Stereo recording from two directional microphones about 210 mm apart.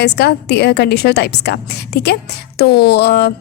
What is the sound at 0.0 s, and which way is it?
A woman's voice, 50° left (ahead or behind).